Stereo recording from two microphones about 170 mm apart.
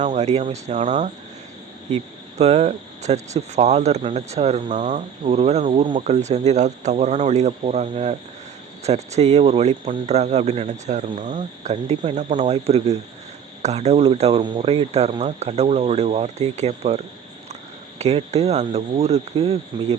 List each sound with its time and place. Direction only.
0.0 s speech: 45° right (ahead or behind)
2.4 s speech: 40° right (ahead or behind)
18.0 s speech: 40° right (ahead or behind)